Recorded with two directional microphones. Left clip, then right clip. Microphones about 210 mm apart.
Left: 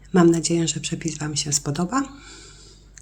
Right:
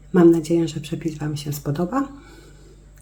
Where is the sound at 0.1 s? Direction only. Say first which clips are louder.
Right 3 dB; 5° left (ahead or behind).